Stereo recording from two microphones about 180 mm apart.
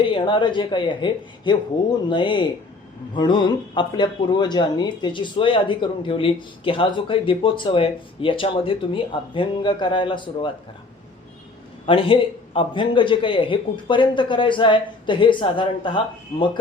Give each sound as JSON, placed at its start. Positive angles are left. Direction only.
{"t": 0.0, "sound": "speech", "side_deg": 25}
{"t": 11.9, "sound": "speech", "side_deg": 30}